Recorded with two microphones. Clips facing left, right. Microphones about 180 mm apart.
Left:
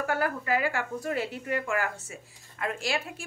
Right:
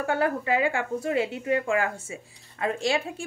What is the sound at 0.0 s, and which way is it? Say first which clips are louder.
Speech: right 4 dB; 25° right (ahead or behind).